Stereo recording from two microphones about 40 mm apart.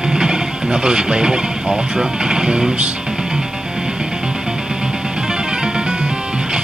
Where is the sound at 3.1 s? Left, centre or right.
Centre.